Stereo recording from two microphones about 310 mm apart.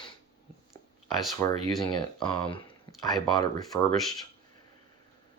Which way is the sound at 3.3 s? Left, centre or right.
Centre.